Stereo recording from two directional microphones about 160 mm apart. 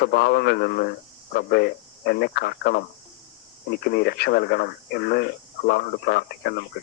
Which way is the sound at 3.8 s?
75° left (ahead or behind).